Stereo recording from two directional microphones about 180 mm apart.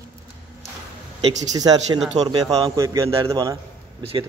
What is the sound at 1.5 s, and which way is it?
Speech, 20° right (ahead or behind).